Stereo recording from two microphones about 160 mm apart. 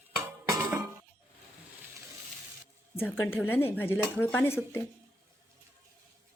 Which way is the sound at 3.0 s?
15° left (ahead or behind).